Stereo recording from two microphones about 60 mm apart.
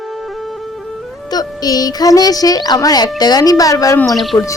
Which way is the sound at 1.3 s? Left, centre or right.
Left.